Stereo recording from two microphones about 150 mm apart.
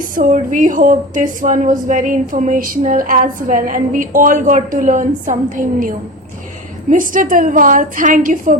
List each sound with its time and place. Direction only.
0.1 s a woman's voice: 60° right (ahead or behind)
6.9 s a woman's voice: 60° right (ahead or behind)